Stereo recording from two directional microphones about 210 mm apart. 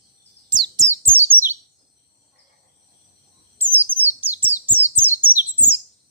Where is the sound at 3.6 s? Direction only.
10° right (ahead or behind).